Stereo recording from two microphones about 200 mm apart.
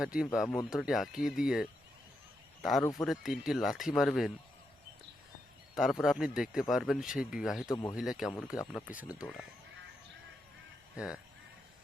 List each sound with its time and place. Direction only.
0.0 s speech: 5° right (ahead or behind)
5.7 s speech: centre (ahead or behind)
7.7 s speech: 15° left (ahead or behind)
7.9 s speech: 5° right (ahead or behind)
10.9 s speech: 5° right (ahead or behind)